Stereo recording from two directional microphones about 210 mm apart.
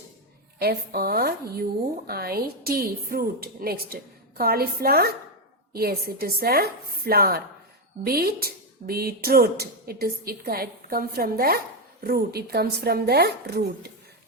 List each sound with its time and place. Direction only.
0.6 s speech: 45° right (ahead or behind)